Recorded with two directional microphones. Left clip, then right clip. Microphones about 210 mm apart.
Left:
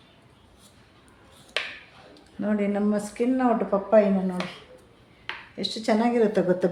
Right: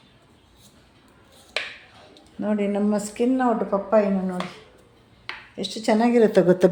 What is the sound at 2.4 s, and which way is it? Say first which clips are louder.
Speech: right 2 dB; 20° right (ahead or behind).